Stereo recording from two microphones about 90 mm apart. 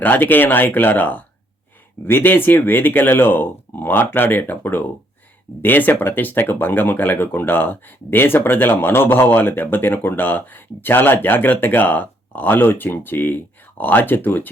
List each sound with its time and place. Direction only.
0.0 s speech: 20° left (ahead or behind)